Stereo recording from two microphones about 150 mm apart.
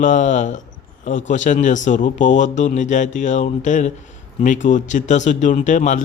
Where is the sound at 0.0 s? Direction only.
55° left (ahead or behind).